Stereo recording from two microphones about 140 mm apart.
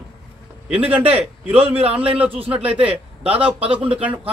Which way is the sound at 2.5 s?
10° right (ahead or behind).